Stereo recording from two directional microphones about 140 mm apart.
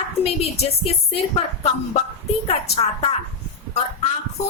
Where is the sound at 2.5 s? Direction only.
45° left (ahead or behind).